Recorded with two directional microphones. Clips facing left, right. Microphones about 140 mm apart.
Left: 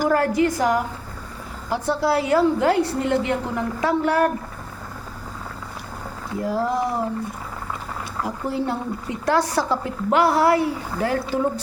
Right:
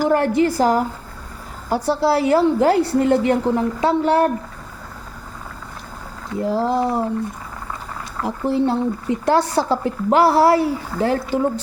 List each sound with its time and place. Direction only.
0.1 s a woman's voice: 25° right (ahead or behind)
6.4 s a woman's voice: 25° right (ahead or behind)
8.4 s a woman's voice: 30° right (ahead or behind)